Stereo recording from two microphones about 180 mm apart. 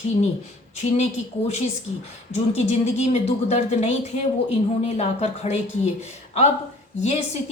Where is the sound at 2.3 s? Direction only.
35° left (ahead or behind).